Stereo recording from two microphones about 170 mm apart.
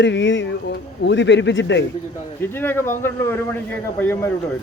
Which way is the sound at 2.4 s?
15° left (ahead or behind).